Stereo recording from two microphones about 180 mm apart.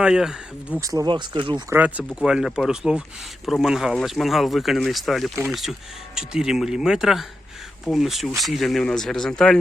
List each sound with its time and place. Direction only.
0.0 s speech: 5° right (ahead or behind)
0.8 s speech: 20° right (ahead or behind)
1.7 s speech: 10° right (ahead or behind)